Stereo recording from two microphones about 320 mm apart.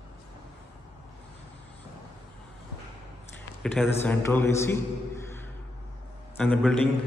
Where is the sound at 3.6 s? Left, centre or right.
Centre.